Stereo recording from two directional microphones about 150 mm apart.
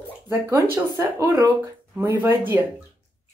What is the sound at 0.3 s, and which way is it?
Speech, 20° right (ahead or behind).